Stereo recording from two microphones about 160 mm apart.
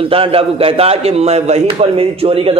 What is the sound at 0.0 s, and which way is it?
A man's voice, 35° right (ahead or behind).